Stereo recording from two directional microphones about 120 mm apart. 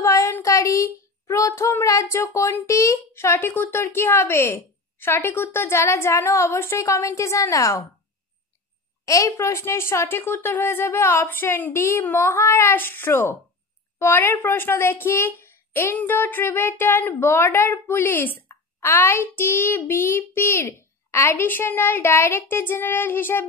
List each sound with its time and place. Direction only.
0.0 s child singing: 25° left (ahead or behind)
2.3 s a woman's voice: 25° left (ahead or behind)
9.0 s a woman's voice: 25° left (ahead or behind)